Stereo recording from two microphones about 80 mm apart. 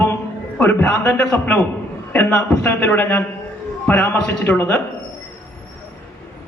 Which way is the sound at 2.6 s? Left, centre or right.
Left.